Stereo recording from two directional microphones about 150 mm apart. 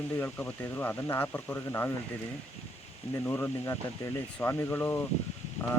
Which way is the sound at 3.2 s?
15° left (ahead or behind).